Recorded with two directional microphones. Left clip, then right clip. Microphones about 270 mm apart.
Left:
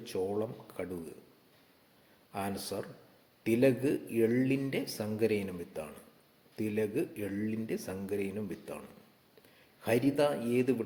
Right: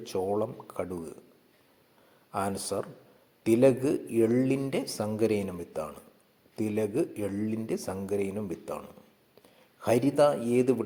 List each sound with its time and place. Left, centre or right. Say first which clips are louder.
0.0 s speech: right 5 dB; centre
2.3 s speech: right 6 dB; centre
9.8 s speech: right 6 dB; centre